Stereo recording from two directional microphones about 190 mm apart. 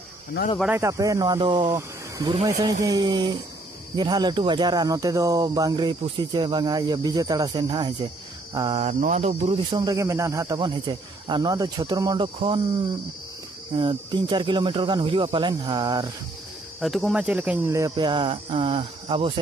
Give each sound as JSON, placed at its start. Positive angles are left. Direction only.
{"t": 0.6, "sound": "speech", "side_deg": -10}
{"t": 13.7, "sound": "speech", "side_deg": -25}
{"t": 16.8, "sound": "speech", "side_deg": 0}